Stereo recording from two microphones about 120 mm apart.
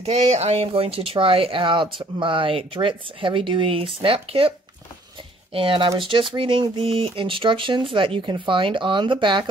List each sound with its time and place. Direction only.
0.0 s speech: 65° right (ahead or behind); by 9.5 s 40° right (ahead or behind)